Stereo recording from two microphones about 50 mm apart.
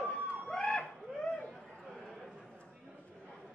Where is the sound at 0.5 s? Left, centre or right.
Centre.